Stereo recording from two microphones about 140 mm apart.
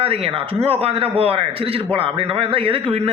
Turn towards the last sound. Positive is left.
turn(degrees=-45)  # may be behind; listen again after turning